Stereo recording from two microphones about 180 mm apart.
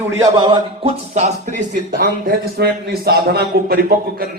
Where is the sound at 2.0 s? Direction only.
60° right (ahead or behind).